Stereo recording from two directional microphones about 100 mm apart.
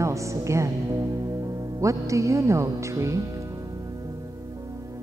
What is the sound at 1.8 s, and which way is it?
Speech, 30° right (ahead or behind).